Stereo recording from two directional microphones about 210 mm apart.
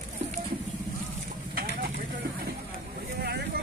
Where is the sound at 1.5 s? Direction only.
45° right (ahead or behind).